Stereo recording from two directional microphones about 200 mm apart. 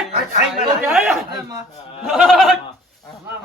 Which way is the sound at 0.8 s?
Centre (ahead or behind).